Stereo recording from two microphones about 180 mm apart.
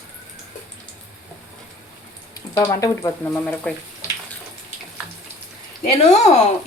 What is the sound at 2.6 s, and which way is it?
Speech, 15° left (ahead or behind).